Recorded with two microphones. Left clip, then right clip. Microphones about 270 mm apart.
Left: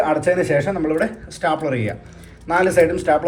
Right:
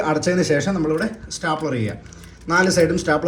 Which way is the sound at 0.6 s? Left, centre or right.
Centre.